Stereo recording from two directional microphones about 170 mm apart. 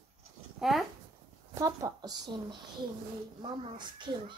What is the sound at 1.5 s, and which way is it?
Speech, 20° right (ahead or behind).